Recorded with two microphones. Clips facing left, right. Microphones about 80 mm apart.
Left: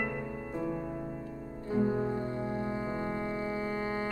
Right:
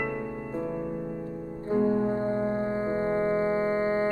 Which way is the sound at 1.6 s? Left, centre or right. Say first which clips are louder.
Right 5 dB; right.